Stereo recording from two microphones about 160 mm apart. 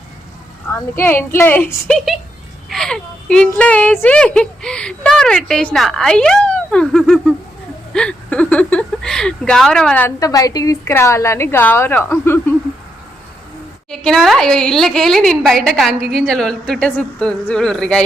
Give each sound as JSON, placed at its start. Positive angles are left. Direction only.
{"t": 0.9, "sound": "a woman's voice", "side_deg": 15}
{"t": 10.2, "sound": "a woman's voice", "side_deg": 20}
{"t": 13.9, "sound": "speech", "side_deg": 5}